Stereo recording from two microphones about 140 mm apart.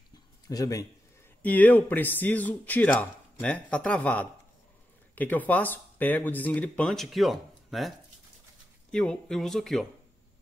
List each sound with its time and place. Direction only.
0.5 s a man's voice: 25° left (ahead or behind)
1.4 s speech: 10° left (ahead or behind)
8.9 s speech: 5° left (ahead or behind)